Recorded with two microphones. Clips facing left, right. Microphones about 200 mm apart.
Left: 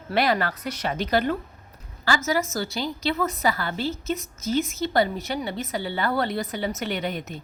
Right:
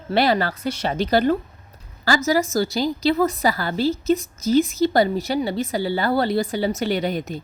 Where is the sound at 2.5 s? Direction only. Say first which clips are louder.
Right 7 dB; 35° right (ahead or behind).